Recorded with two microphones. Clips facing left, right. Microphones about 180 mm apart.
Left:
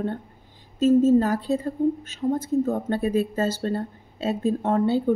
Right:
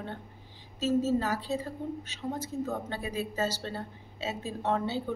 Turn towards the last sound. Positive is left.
turn(degrees=50)  # may be behind; listen again after turning